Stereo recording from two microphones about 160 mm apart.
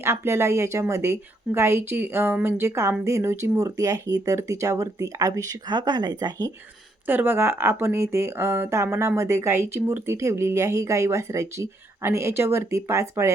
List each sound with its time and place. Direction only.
0.0 s speech: 15° right (ahead or behind)
7.1 s speech: 15° right (ahead or behind)